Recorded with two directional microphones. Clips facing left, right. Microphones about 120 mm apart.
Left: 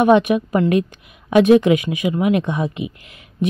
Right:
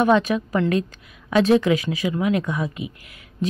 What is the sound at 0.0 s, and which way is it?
Speech, 20° left (ahead or behind).